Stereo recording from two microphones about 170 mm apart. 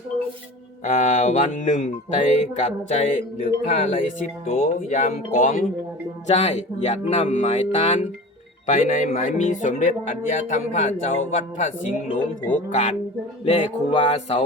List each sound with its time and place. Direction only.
0.9 s speech: 50° left (ahead or behind)
6.2 s speech: 40° left (ahead or behind)